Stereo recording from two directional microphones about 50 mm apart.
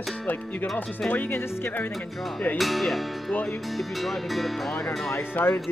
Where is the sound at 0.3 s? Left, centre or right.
Left.